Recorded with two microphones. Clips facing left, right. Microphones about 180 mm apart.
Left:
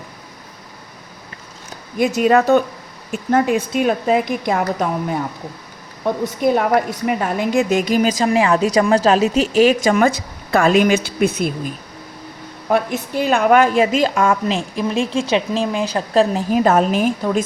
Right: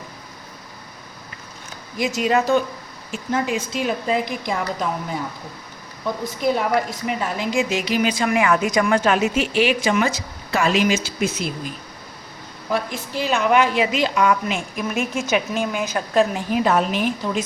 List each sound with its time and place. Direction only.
2.0 s a woman's voice: 55° left (ahead or behind)
14.4 s a woman's voice: 30° left (ahead or behind); by 17.4 s 50° left (ahead or behind)